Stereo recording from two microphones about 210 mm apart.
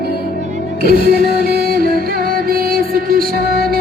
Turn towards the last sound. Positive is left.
turn(degrees=-45)  # may be behind; listen again after turning